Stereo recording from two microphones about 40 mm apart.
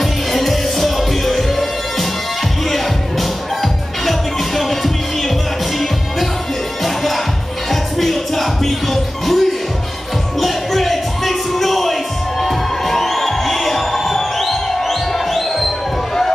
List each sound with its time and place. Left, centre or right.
0.0 s music: centre
6.8 s music: centre
10.4 s music: centre